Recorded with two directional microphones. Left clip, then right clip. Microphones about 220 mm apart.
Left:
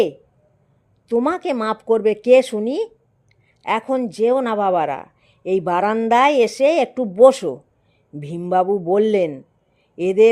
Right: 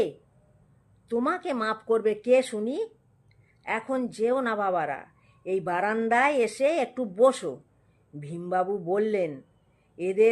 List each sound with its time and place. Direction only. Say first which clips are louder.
1.0 s a man's voice: left 8 dB; 35° left (ahead or behind)